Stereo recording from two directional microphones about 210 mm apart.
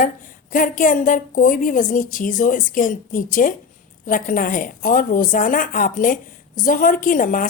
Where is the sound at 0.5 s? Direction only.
40° left (ahead or behind).